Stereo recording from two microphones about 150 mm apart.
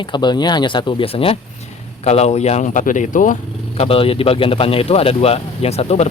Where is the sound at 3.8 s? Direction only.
40° left (ahead or behind).